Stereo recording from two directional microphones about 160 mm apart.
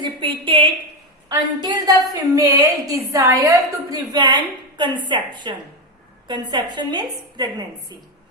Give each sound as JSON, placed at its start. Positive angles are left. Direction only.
{"t": 0.0, "sound": "a woman's voice", "side_deg": -30}